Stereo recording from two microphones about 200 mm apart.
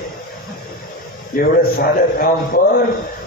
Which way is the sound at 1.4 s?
50° left (ahead or behind).